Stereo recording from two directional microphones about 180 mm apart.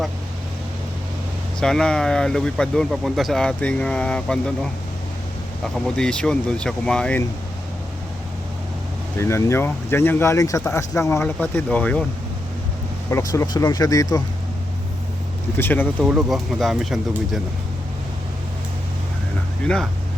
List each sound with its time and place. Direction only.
1.5 s speech: 5° left (ahead or behind)
5.6 s speech: 5° left (ahead or behind)
9.1 s speech: 15° left (ahead or behind)
13.1 s speech: 15° left (ahead or behind)
15.5 s speech: 10° left (ahead or behind)
16.0 s speech: 5° right (ahead or behind)
19.6 s speech: 5° left (ahead or behind)